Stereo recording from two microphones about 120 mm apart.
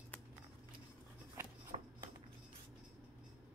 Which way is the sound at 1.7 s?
55° right (ahead or behind).